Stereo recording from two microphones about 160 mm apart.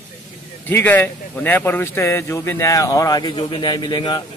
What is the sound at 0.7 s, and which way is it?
Speech, 10° left (ahead or behind).